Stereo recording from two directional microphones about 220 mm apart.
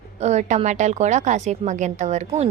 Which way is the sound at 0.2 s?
30° right (ahead or behind).